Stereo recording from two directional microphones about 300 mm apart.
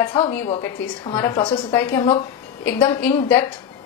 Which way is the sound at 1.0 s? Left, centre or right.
Centre.